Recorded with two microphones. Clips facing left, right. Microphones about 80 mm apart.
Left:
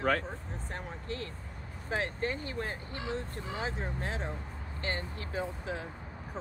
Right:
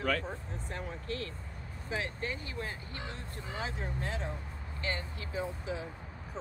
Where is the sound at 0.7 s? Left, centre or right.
Left.